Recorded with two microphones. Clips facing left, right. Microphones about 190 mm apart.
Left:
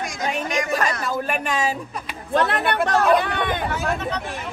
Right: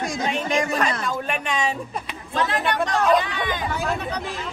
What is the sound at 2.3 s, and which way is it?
Speech, 60° left (ahead or behind).